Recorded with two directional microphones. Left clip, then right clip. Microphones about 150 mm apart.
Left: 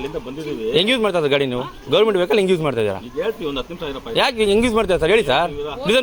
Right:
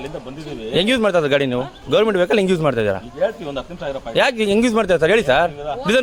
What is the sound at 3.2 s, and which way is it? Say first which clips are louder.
Speech: right 1 dB; 30° right (ahead or behind).